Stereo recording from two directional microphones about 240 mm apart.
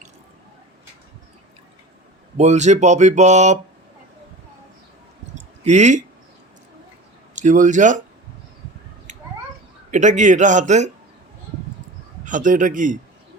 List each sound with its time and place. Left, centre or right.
2.4 s speech: right
5.6 s speech: right
7.3 s a man's voice: right
9.1 s cat: right
9.9 s a man's voice: right
12.2 s a man's voice: right